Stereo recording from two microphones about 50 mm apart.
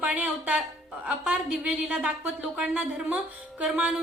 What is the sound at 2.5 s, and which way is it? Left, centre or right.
Speech, right.